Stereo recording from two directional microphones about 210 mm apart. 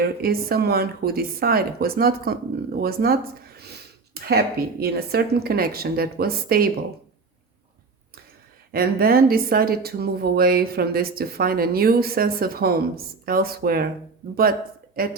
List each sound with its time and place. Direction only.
0.0 s speech: 45° right (ahead or behind)
8.7 s speech: 45° right (ahead or behind)
15.0 s speech: 45° right (ahead or behind)